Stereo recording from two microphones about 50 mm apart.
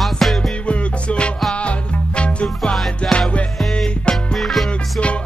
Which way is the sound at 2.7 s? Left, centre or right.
Centre.